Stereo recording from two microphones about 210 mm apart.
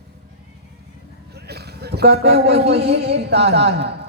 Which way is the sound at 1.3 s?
50° right (ahead or behind).